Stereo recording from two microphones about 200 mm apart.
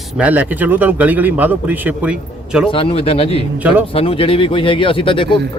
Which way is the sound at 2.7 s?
30° left (ahead or behind).